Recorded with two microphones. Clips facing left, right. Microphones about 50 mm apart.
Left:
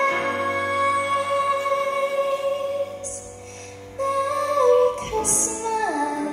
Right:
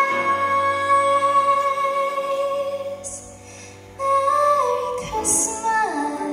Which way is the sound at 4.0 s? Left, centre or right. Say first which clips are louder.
Right 5 dB; right.